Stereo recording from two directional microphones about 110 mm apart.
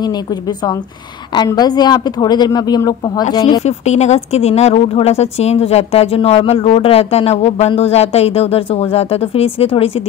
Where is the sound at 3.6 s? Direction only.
90° left; by 10.0 s 60° left (ahead or behind).